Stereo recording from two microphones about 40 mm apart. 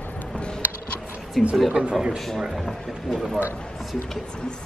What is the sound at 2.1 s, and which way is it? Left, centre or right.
Speech, centre.